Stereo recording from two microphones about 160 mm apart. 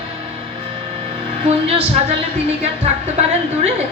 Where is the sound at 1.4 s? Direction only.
40° right (ahead or behind).